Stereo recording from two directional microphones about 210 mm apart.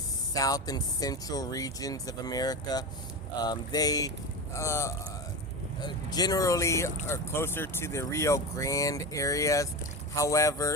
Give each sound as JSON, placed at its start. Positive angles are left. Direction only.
{"t": 0.3, "sound": "speech", "side_deg": 15}